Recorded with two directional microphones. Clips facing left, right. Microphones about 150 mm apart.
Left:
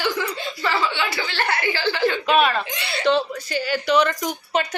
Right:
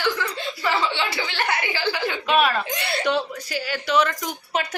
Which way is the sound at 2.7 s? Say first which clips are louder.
Right 2 dB; 50° right (ahead or behind).